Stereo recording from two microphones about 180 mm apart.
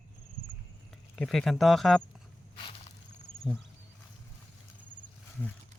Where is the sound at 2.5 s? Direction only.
30° left (ahead or behind).